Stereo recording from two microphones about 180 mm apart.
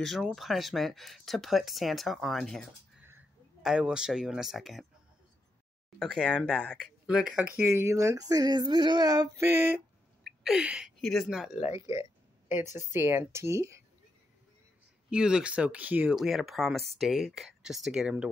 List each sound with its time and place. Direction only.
0.0 s speech: centre (ahead or behind)
3.1 s speech: 10° right (ahead or behind)
5.9 s speech: 5° left (ahead or behind)
11.8 s a sound: 15° right (ahead or behind)
12.9 s speech: 15° right (ahead or behind)
15.0 s speech: 5° right (ahead or behind)